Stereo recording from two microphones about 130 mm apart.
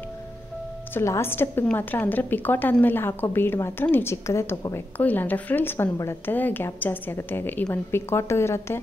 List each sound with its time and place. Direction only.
0.9 s a woman's voice: 20° left (ahead or behind)